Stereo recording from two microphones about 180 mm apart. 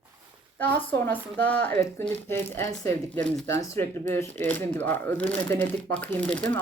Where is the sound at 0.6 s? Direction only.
10° left (ahead or behind).